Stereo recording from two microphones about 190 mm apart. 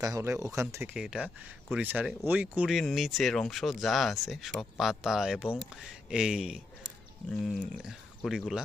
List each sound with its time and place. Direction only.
0.0 s speech: 15° right (ahead or behind)